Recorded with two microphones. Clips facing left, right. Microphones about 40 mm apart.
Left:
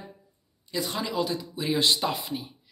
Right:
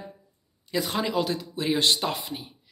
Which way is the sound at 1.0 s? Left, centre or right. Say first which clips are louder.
Right 2 dB; right.